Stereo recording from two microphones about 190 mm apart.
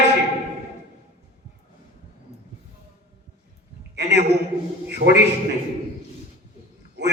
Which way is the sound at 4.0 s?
60° right (ahead or behind).